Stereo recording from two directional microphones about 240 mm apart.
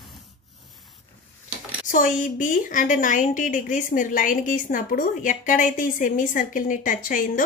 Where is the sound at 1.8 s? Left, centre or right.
Left.